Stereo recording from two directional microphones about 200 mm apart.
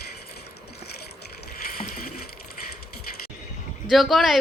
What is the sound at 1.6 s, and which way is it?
Rowboat, 45° left (ahead or behind).